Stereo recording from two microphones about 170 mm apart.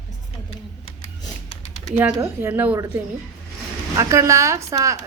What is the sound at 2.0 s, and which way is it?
A woman's voice, 15° right (ahead or behind).